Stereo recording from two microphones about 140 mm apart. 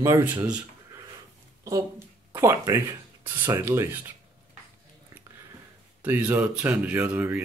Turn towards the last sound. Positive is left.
turn(degrees=-10)  # may be behind; listen again after turning